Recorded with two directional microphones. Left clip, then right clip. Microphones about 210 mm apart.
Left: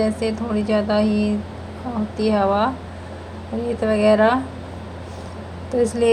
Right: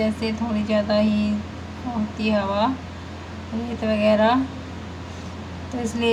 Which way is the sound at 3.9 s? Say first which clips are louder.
Left 2 dB; 20° left (ahead or behind).